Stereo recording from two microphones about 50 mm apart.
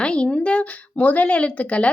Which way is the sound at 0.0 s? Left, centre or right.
Left.